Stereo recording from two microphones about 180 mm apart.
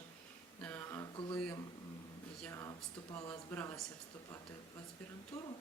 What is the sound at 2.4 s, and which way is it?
Speech, 15° left (ahead or behind).